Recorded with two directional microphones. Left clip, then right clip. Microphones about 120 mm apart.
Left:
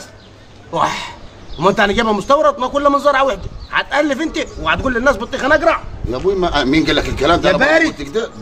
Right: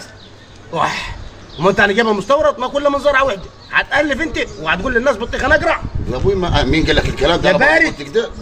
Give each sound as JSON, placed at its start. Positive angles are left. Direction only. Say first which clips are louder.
{"t": 0.7, "sound": "a man's voice", "louder": "left 1 dB", "side_deg": 25}